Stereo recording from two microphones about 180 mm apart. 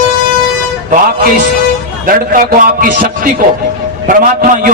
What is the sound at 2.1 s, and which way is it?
A man's voice, 50° right (ahead or behind).